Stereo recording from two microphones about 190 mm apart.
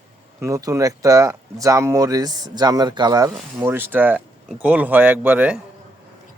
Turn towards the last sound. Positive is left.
turn(degrees=-10)  # may be behind; listen again after turning